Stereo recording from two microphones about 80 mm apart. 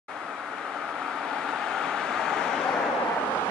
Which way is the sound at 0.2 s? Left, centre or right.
Centre.